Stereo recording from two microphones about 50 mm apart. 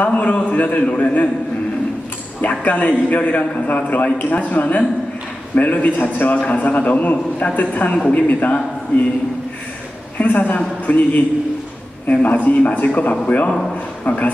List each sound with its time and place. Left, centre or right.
0.0 s a man's voice: left
2.6 s a man's voice: left
10.1 s a woman's voice: left